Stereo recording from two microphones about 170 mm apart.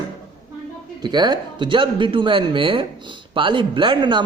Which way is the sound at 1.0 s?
25° right (ahead or behind).